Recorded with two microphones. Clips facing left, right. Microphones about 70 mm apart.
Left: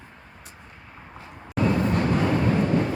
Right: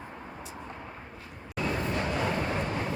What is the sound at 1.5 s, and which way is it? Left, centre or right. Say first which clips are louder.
Vehicle: left 8 dB; left.